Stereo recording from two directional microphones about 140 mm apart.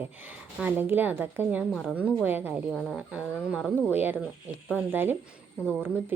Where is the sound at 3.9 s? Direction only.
15° right (ahead or behind).